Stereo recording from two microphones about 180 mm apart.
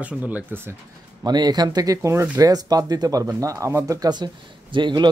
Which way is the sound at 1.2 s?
25° right (ahead or behind).